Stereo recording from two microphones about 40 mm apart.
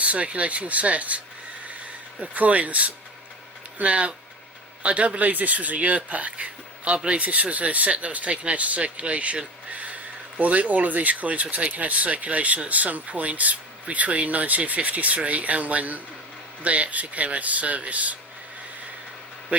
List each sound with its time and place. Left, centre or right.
0.0 s speech: right